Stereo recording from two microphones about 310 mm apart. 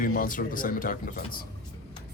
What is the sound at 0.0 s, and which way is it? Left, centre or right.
Speech, left.